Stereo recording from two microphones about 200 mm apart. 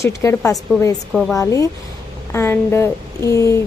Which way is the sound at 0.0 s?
15° left (ahead or behind).